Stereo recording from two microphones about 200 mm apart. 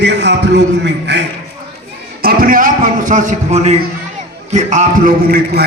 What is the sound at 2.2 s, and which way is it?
A man's voice, 45° right (ahead or behind).